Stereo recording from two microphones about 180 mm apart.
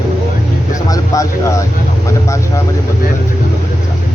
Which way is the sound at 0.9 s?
15° left (ahead or behind).